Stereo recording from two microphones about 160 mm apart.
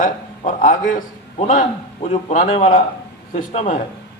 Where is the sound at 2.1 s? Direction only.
35° left (ahead or behind).